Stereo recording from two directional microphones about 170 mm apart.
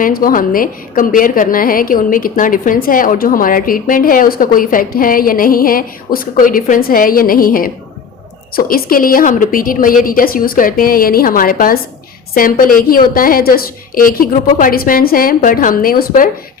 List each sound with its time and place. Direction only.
0.0 s a woman's voice: 55° left (ahead or behind)